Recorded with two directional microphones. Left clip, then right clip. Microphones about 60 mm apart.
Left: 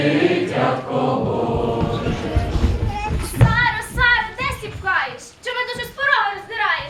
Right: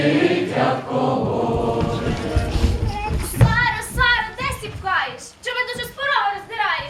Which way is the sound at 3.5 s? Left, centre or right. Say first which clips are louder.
Left 1 dB; centre.